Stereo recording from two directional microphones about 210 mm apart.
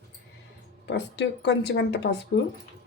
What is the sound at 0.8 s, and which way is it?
Speech, 55° left (ahead or behind).